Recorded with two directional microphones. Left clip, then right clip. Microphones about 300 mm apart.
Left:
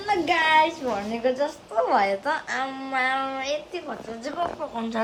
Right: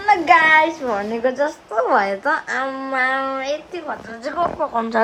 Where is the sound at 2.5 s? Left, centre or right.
Centre.